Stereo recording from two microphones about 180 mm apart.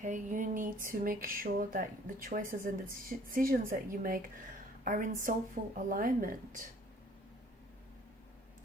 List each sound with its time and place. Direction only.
0.0 s speech: 45° right (ahead or behind)